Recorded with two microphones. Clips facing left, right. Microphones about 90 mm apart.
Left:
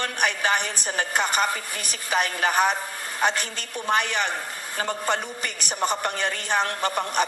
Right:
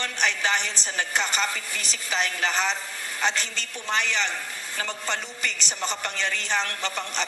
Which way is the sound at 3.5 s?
50° left (ahead or behind).